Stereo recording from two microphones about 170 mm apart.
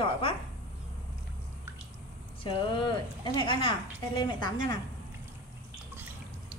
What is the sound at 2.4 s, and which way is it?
Speech, 30° left (ahead or behind).